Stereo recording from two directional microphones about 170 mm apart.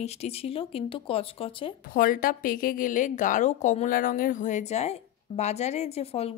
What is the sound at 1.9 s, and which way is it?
A woman's voice, 55° left (ahead or behind).